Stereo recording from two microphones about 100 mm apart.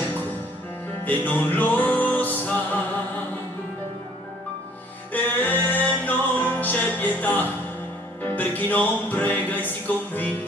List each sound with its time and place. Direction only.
1.0 s music: 15° left (ahead or behind)
5.1 s music: 15° left (ahead or behind)